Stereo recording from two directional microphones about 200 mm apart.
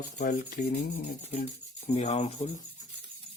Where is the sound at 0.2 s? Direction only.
40° left (ahead or behind).